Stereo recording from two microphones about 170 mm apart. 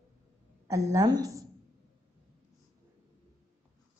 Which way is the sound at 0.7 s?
20° right (ahead or behind).